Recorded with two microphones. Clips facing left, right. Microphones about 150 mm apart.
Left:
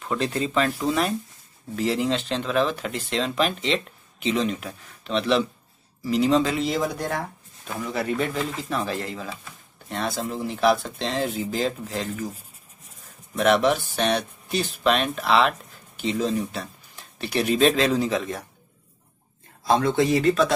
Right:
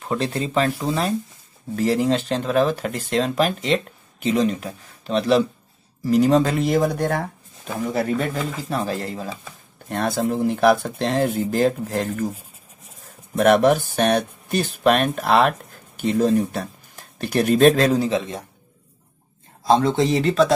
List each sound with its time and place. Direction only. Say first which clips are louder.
0.0 s speech: right 2 dB; 35° right (ahead or behind)
9.8 s speech: right 6 dB; 50° right (ahead or behind)
13.4 s speech: right 4 dB; 50° right (ahead or behind); by 18.4 s 25° right (ahead or behind)
19.7 s speech: right 2 dB; 25° right (ahead or behind)